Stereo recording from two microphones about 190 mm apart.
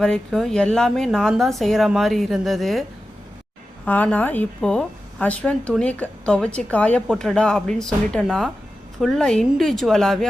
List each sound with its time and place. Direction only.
0.0 s a woman's voice: centre (ahead or behind)
3.8 s a woman's voice: 10° left (ahead or behind)